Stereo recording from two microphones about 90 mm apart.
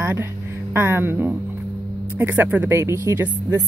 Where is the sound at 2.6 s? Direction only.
30° right (ahead or behind).